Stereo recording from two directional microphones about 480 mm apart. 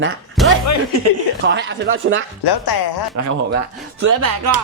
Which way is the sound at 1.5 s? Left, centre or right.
Right.